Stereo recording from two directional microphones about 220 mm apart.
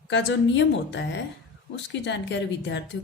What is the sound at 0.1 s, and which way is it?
A woman's voice, 55° left (ahead or behind).